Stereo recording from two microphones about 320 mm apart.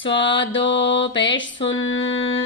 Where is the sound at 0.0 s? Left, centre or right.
Left.